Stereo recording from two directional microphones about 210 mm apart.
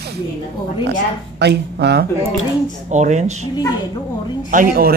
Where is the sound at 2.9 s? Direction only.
35° right (ahead or behind).